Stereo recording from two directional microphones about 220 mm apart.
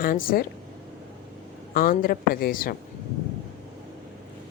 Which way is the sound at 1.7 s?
40° left (ahead or behind).